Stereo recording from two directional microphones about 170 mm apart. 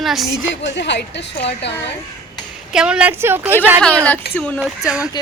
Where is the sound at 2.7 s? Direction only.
5° right (ahead or behind).